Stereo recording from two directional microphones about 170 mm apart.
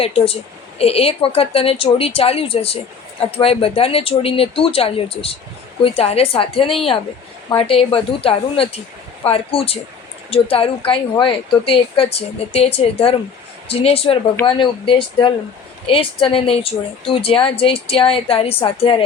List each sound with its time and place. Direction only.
0.0 s speech: 35° left (ahead or behind)
16.2 s speech: 30° left (ahead or behind)